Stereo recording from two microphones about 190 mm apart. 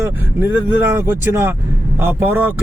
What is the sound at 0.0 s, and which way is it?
Speech, 10° right (ahead or behind).